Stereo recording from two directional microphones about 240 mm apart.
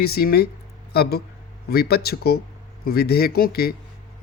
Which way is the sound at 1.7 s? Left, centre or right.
Left.